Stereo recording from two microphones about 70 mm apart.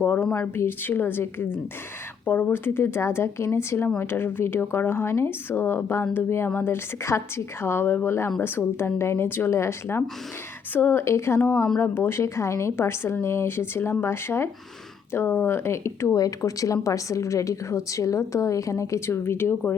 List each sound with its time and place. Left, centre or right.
0.2 s speech: centre
0.5 s a woman's voice: left
16.1 s a woman's voice: left